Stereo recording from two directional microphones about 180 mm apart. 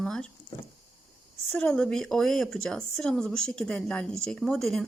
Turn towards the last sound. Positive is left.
turn(degrees=5)  # may be behind; listen again after turning